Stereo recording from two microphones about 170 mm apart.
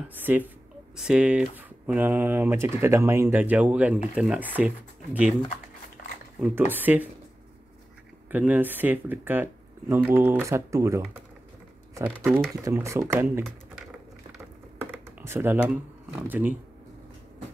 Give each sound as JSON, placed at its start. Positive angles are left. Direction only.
{"t": 0.1, "sound": "speech", "side_deg": -10}
{"t": 6.4, "sound": "speech", "side_deg": -10}
{"t": 8.3, "sound": "speech", "side_deg": -10}
{"t": 14.8, "sound": "a sound", "side_deg": -15}